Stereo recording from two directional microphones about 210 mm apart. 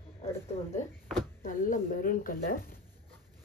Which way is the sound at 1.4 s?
40° left (ahead or behind).